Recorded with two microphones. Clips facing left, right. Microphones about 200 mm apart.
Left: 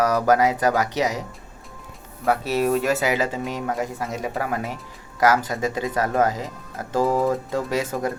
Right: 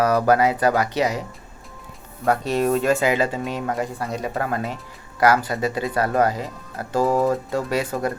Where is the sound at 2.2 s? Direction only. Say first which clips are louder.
Right 1 dB; 5° left (ahead or behind).